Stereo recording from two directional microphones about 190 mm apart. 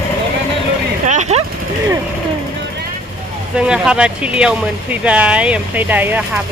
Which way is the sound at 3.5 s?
5° right (ahead or behind).